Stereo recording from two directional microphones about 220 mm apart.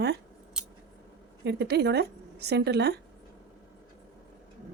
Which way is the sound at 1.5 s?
50° right (ahead or behind).